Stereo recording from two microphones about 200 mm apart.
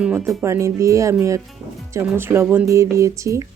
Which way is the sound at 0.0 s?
5° right (ahead or behind).